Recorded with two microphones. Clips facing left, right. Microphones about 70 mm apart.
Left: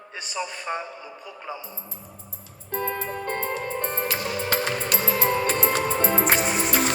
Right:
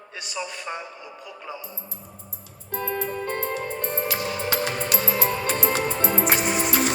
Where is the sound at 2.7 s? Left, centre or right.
Left.